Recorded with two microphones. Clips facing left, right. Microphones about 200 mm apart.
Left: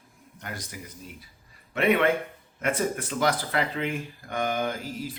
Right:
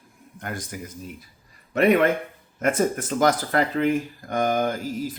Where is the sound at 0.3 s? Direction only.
50° right (ahead or behind).